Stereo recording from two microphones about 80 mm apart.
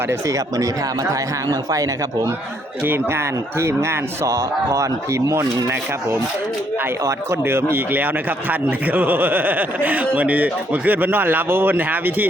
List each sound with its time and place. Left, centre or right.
0.1 s speech: right
2.8 s a man's voice: right
7.0 s speech: right